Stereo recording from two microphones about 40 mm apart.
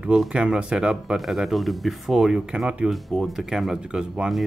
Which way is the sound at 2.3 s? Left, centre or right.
Centre.